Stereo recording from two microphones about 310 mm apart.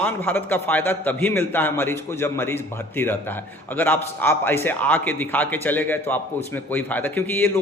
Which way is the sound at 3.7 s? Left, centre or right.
Centre.